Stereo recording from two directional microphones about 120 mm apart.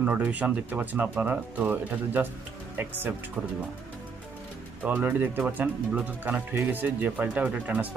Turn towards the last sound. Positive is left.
turn(degrees=-10)  # may be behind; listen again after turning